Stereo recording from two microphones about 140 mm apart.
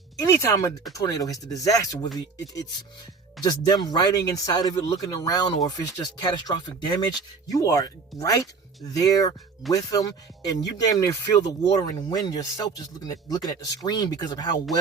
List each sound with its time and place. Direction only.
0.2 s speech: 25° left (ahead or behind)
3.4 s speech: 30° left (ahead or behind)